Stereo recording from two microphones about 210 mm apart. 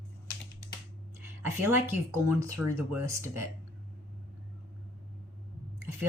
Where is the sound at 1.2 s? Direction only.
10° right (ahead or behind).